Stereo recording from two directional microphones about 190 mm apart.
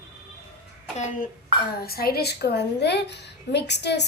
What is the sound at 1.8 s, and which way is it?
A woman's voice, 55° left (ahead or behind).